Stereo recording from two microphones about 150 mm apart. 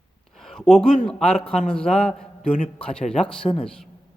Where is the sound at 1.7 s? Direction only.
5° left (ahead or behind).